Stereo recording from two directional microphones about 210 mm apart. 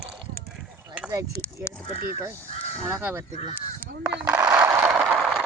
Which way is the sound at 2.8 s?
10° right (ahead or behind).